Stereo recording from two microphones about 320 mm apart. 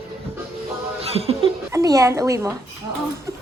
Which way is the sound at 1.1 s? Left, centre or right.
Centre.